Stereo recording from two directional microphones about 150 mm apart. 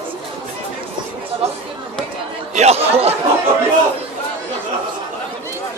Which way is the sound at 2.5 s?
45° right (ahead or behind).